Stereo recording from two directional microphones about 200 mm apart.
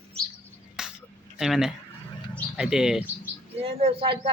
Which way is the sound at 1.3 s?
Centre (ahead or behind).